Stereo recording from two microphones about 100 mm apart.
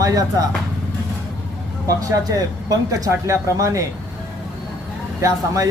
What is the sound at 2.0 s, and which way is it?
Speech, 35° right (ahead or behind).